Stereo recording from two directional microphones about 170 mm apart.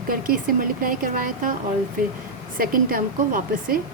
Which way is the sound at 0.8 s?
55° right (ahead or behind).